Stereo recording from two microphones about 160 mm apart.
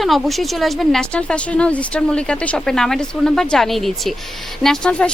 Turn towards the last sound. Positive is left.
turn(degrees=5)  # may be behind; listen again after turning